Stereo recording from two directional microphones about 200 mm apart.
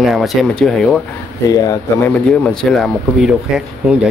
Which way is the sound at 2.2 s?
5° left (ahead or behind).